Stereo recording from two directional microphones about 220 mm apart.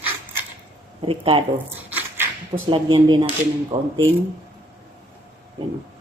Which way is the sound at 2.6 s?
20° right (ahead or behind).